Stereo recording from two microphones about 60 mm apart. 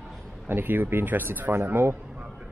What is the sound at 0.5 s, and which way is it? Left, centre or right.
Speech, right.